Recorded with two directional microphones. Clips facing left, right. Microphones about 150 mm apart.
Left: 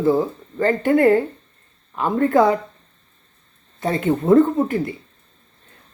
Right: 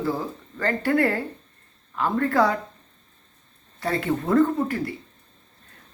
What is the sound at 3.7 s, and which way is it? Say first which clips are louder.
Speech: left 5 dB; 20° left (ahead or behind).